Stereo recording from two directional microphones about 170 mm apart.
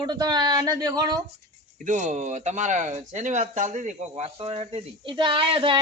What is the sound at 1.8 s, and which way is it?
Speech, 45° right (ahead or behind).